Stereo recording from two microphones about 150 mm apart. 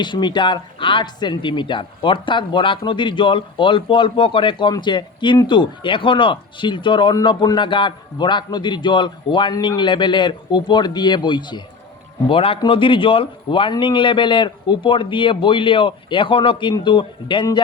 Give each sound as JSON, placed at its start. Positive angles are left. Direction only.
{"t": 0.0, "sound": "speech", "side_deg": 30}